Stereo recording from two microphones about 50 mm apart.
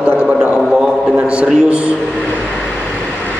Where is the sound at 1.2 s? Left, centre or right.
Right.